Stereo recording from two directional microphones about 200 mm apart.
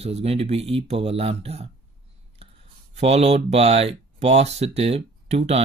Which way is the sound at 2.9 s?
35° right (ahead or behind).